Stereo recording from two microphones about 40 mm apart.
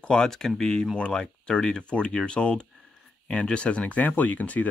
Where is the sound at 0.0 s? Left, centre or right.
Left.